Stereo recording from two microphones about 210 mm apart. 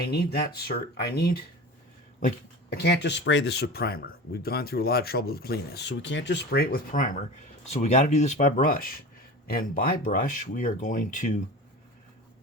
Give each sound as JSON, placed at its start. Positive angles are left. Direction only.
{"t": 0.0, "sound": "speech", "side_deg": 50}
{"t": 7.6, "sound": "speech", "side_deg": 30}